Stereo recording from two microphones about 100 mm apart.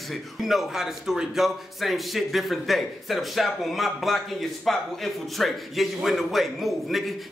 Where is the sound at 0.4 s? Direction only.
5° right (ahead or behind).